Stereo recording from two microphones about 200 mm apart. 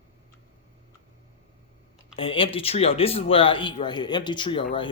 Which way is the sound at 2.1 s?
25° left (ahead or behind).